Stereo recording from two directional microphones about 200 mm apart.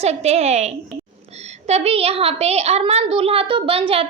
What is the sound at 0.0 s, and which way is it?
A child's voice, 35° right (ahead or behind).